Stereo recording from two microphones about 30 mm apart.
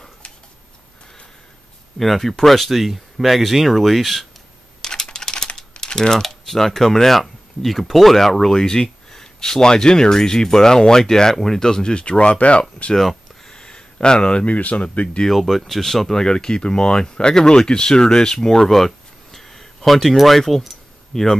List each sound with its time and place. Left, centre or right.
2.0 s speech: centre
4.8 s typing: left
5.9 s speech: centre
11.9 s speech: left
13.5 s a sound: left
14.4 s speech: left
15.3 s speech: centre
16.3 s speech: left
18.7 s a sound: centre